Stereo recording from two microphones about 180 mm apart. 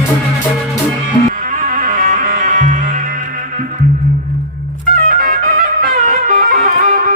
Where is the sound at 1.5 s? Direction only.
45° right (ahead or behind).